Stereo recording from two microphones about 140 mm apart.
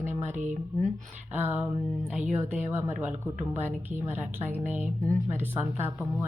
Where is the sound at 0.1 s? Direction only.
60° right (ahead or behind).